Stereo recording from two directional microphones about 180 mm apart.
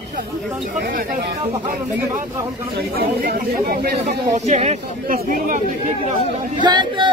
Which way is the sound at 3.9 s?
40° right (ahead or behind).